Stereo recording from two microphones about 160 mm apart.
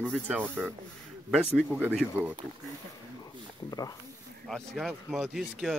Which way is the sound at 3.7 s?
20° left (ahead or behind).